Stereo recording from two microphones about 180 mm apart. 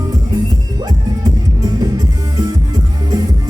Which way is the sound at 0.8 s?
20° right (ahead or behind).